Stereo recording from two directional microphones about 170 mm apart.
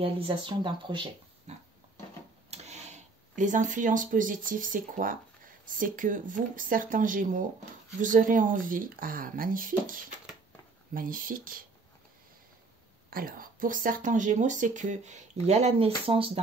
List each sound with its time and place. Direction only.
0.0 s speech: 25° right (ahead or behind)
1.5 s pig: 40° right (ahead or behind)
2.5 s speech: 40° right (ahead or behind); by 11.6 s 55° right (ahead or behind)
13.1 s speech: 60° right (ahead or behind); by 16.3 s 35° right (ahead or behind)